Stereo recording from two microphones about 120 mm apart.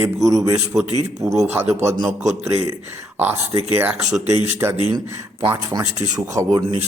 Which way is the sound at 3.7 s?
15° right (ahead or behind).